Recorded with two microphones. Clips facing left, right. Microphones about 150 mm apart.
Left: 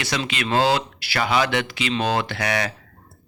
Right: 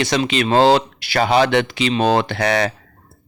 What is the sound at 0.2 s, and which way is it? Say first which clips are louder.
Speech: right 6 dB; 25° right (ahead or behind).